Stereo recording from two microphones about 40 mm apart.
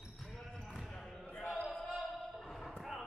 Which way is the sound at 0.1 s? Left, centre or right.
Centre.